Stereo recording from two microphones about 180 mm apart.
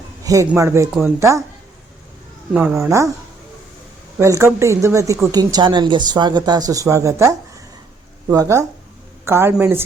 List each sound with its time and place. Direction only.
0.2 s a sound: 20° right (ahead or behind)
0.4 s speech: 15° right (ahead or behind)
0.9 s speech: 5° right (ahead or behind)
1.2 s speech: 15° right (ahead or behind)
2.5 s speech: 10° right (ahead or behind)
4.2 s speech: 15° right (ahead or behind)